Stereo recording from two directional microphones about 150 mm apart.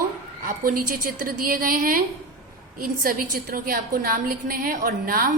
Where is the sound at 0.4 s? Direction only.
70° right (ahead or behind).